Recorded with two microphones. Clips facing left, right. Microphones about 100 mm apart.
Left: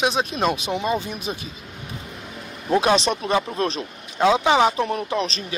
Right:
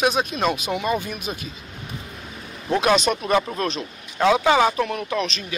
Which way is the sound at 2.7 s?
30° left (ahead or behind).